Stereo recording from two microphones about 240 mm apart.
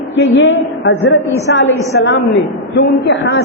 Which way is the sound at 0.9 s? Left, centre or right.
Left.